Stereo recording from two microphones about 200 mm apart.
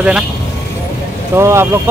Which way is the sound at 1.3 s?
15° right (ahead or behind).